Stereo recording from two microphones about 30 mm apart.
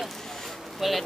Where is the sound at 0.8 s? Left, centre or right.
Centre.